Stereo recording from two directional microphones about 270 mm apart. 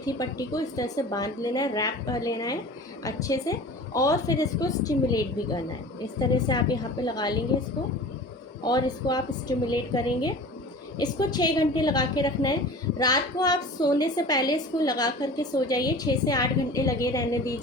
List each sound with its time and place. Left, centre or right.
0.0 s a woman's voice: centre
8.6 s a woman's voice: centre